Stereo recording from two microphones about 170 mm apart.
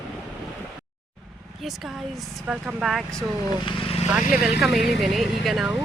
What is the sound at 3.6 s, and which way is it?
Vehicle, 35° left (ahead or behind).